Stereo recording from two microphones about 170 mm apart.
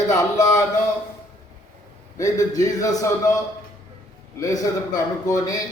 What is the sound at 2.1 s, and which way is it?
A man's voice, 20° left (ahead or behind).